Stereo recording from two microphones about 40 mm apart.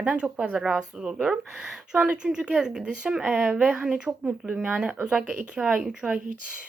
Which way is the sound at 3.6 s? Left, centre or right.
Right.